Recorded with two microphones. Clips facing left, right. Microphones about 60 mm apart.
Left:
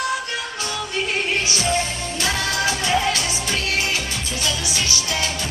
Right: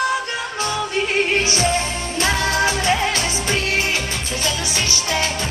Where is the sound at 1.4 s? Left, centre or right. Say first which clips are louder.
Right 2 dB; right.